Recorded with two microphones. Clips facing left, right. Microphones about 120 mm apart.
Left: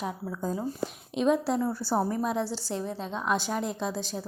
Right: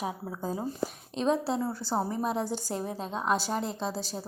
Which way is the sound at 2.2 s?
40° right (ahead or behind).